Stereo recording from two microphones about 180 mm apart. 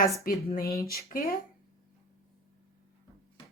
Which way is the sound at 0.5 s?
55° left (ahead or behind).